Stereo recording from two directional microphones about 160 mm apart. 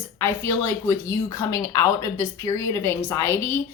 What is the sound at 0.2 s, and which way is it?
A woman's voice, 15° left (ahead or behind).